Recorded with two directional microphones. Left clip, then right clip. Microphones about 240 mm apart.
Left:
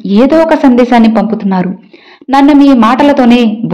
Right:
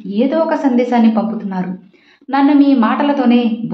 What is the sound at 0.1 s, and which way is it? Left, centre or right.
A woman's voice, left.